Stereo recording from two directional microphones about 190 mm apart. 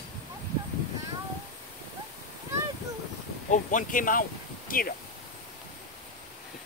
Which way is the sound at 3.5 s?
40° left (ahead or behind).